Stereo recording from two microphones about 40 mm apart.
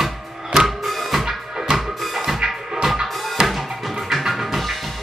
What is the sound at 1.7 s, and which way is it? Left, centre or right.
Music, right.